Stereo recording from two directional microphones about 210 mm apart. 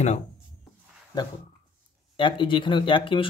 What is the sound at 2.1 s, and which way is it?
Speech, 25° left (ahead or behind).